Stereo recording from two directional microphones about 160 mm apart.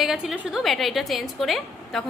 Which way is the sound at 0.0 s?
5° right (ahead or behind).